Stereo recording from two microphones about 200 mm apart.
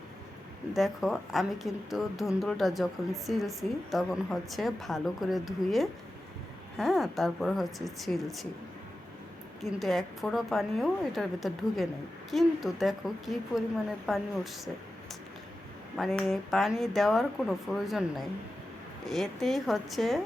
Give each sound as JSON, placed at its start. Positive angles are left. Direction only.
{"t": 0.7, "sound": "speech", "side_deg": 0}
{"t": 9.6, "sound": "speech", "side_deg": 0}
{"t": 16.0, "sound": "speech", "side_deg": 0}